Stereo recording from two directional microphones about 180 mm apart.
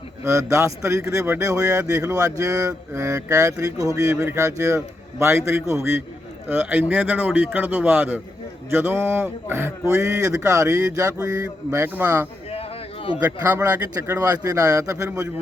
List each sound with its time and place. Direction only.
0.3 s a man's voice: 15° right (ahead or behind)